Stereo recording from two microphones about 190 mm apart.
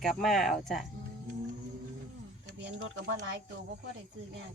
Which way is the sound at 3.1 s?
70° right (ahead or behind).